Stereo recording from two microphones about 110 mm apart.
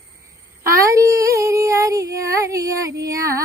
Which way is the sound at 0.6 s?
30° right (ahead or behind).